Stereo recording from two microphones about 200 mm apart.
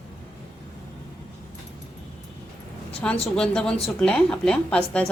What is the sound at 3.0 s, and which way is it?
A woman's voice, 5° left (ahead or behind).